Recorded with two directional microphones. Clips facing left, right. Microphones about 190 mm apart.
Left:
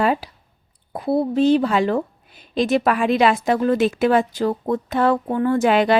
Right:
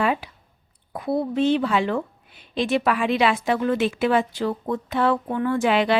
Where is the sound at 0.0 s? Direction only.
40° left (ahead or behind).